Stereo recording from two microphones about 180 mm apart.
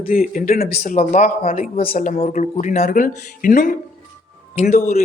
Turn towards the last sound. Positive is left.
turn(degrees=40)  # may be behind; listen again after turning